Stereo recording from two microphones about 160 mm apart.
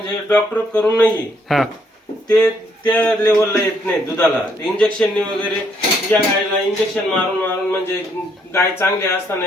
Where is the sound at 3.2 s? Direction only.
20° left (ahead or behind).